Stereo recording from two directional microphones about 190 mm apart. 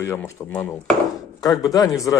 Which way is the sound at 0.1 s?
10° left (ahead or behind).